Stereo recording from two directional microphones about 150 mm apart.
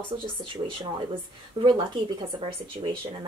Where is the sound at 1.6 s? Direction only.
30° right (ahead or behind).